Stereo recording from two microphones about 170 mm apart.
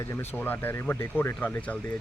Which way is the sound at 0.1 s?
10° left (ahead or behind).